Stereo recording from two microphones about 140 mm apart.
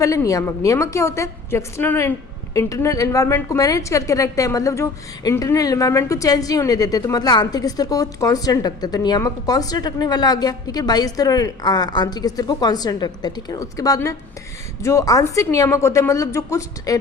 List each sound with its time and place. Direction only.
0.0 s a woman's voice: 25° left (ahead or behind)